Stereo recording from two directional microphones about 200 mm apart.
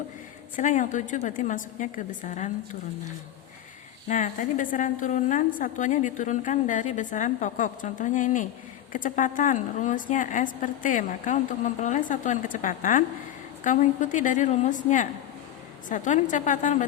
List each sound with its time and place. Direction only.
0.5 s a woman's voice: 40° left (ahead or behind)
4.1 s a woman's voice: 40° left (ahead or behind)